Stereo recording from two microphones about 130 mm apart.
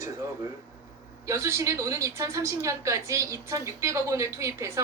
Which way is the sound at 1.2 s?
20° right (ahead or behind).